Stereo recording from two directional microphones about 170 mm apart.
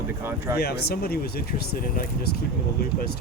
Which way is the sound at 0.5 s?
70° left (ahead or behind).